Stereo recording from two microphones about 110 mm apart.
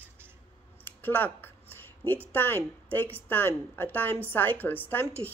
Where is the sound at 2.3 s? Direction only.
20° left (ahead or behind).